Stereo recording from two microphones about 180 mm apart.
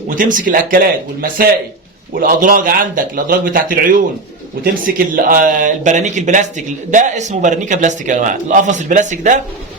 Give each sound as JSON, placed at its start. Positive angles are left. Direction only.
{"t": 0.2, "sound": "speech", "side_deg": -50}